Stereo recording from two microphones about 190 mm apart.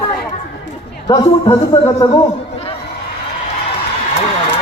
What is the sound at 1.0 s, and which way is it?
A man's voice, 20° left (ahead or behind).